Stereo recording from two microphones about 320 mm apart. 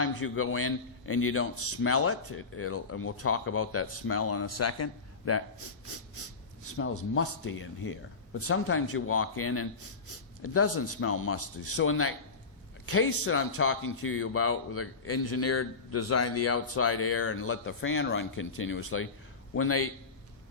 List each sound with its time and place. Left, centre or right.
0.0 s a man's voice: left